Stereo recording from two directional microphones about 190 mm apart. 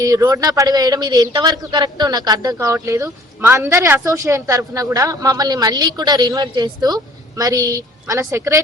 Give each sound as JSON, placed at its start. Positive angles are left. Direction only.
{"t": 0.0, "sound": "a woman's voice", "side_deg": -15}